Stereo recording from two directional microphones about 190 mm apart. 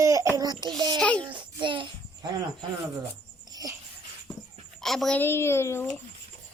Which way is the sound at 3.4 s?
20° right (ahead or behind).